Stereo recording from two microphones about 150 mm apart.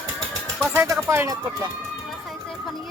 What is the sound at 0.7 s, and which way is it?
Speech, 15° right (ahead or behind).